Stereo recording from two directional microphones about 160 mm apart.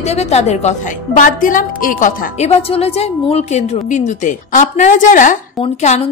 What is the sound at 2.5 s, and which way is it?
A woman's voice, 40° left (ahead or behind).